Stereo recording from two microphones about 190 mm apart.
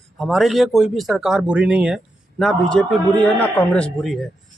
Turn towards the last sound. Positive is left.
turn(degrees=5)  # may be behind; listen again after turning